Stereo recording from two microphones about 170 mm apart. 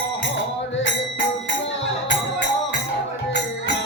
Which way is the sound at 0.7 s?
90° left.